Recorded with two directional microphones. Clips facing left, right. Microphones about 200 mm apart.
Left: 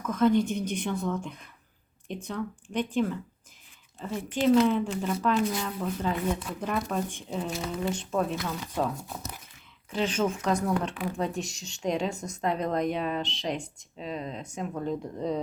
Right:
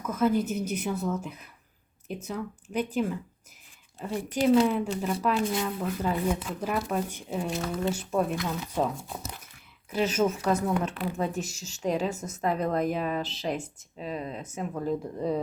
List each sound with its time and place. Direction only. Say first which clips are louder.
0.0 s a woman's voice: left 2 dB; 5° right (ahead or behind)
4.1 s speech: right 1 dB; 35° right (ahead or behind)
4.6 s speech: left 1 dB; 10° right (ahead or behind)
5.4 s speech: even; 25° right (ahead or behind)
5.6 s speech: right 1 dB; 10° right (ahead or behind)
9.0 s a woman's voice: right 1 dB; centre (ahead or behind)